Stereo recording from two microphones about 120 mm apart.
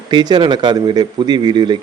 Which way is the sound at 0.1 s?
35° right (ahead or behind).